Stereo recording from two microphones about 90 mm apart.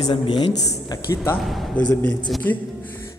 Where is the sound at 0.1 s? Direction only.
70° left (ahead or behind).